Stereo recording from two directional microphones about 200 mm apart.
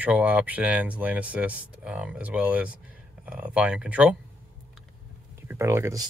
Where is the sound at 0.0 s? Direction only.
10° right (ahead or behind).